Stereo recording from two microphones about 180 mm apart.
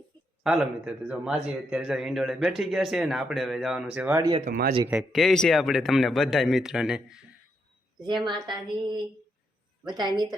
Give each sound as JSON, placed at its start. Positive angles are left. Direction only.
{"t": 0.4, "sound": "a man's voice", "side_deg": -5}
{"t": 4.4, "sound": "speech", "side_deg": -55}
{"t": 4.9, "sound": "a man's voice", "side_deg": 0}
{"t": 8.0, "sound": "a woman's voice", "side_deg": -25}
{"t": 9.8, "sound": "a woman's voice", "side_deg": -25}